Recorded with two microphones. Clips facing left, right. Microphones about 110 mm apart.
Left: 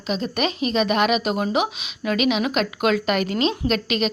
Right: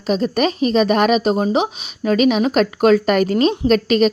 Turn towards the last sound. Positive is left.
turn(degrees=-40)  # may be behind; listen again after turning